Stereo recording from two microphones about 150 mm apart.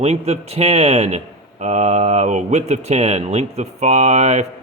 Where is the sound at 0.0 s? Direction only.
45° right (ahead or behind).